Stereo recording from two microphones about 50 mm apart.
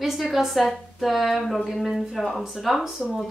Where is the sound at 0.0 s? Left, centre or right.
Centre.